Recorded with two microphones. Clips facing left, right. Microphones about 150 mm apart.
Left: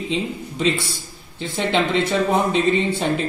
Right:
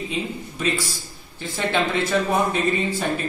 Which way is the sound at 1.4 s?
20° left (ahead or behind).